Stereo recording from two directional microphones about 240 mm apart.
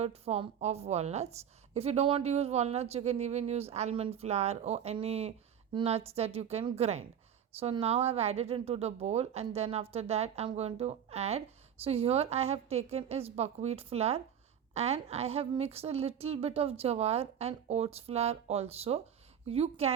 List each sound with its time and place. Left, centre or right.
0.0 s speech: right